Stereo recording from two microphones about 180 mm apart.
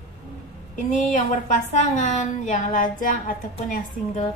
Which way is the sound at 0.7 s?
45° left (ahead or behind).